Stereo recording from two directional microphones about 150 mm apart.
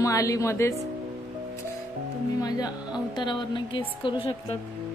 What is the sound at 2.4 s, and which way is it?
A woman's voice, 25° left (ahead or behind).